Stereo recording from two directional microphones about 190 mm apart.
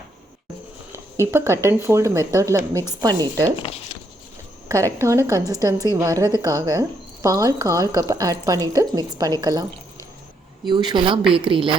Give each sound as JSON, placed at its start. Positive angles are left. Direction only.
{"t": 1.3, "sound": "a woman's voice", "side_deg": -15}
{"t": 4.7, "sound": "a woman's voice", "side_deg": -15}
{"t": 10.7, "sound": "a woman's voice", "side_deg": -25}